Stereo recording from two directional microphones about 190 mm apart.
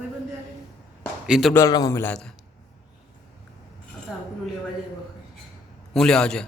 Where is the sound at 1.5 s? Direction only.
20° left (ahead or behind).